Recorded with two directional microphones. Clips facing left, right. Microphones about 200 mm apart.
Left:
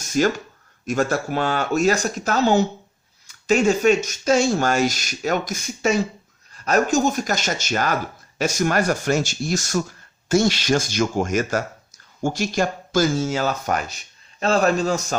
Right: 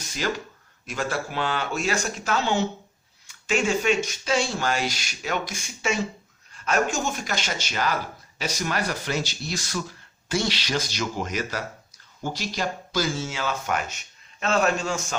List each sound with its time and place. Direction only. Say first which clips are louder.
0.0 s speech: left 9 dB; 45° left (ahead or behind)